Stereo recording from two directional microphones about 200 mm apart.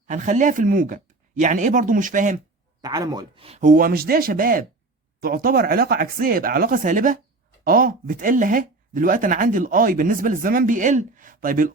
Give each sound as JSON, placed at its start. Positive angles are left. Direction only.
{"t": 0.1, "sound": "speech", "side_deg": -40}
{"t": 2.8, "sound": "speech", "side_deg": -20}